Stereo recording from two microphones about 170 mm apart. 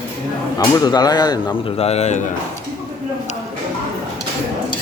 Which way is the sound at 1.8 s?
40° left (ahead or behind).